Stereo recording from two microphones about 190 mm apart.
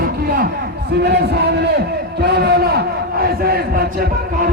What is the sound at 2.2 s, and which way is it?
Crowd, 60° right (ahead or behind).